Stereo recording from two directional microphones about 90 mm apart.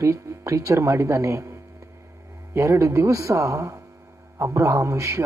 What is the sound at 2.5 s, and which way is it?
A man's voice, 35° right (ahead or behind).